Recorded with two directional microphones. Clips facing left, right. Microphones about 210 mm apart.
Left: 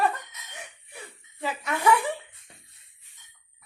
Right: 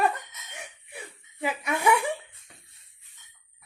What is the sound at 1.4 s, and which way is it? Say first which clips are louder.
Speech: even; 10° right (ahead or behind).